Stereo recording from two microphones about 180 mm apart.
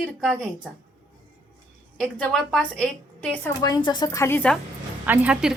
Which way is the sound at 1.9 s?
Centre (ahead or behind).